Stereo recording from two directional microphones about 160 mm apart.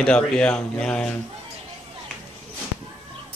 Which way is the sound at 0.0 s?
5° left (ahead or behind).